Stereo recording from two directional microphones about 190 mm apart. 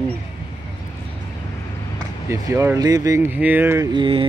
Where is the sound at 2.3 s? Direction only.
15° right (ahead or behind).